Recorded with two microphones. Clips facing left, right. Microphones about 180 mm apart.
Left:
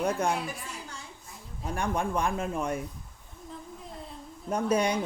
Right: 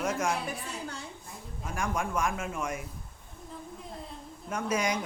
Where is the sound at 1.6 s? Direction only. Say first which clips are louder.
Left 3 dB; 35° left (ahead or behind).